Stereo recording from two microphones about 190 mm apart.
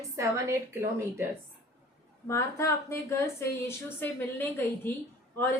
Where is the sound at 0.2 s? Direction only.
15° right (ahead or behind).